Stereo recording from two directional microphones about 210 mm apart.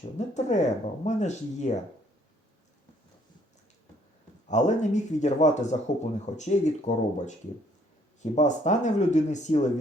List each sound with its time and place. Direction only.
0.2 s speech: 35° left (ahead or behind)
4.4 s speech: 35° left (ahead or behind)